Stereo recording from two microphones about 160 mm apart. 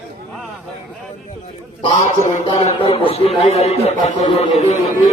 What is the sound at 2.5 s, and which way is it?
A man's voice, 35° left (ahead or behind).